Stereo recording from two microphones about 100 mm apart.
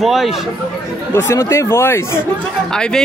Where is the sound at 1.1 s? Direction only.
25° left (ahead or behind).